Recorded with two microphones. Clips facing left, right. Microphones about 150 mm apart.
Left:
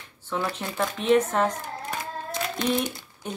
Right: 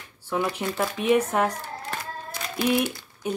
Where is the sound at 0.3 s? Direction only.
10° right (ahead or behind).